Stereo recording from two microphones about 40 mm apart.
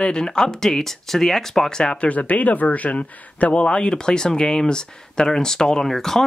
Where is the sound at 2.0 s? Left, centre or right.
Left.